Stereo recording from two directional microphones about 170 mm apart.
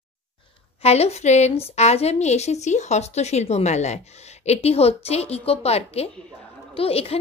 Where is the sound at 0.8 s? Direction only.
40° left (ahead or behind).